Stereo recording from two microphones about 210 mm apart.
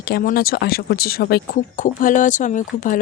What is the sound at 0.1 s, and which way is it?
Speech, 45° left (ahead or behind).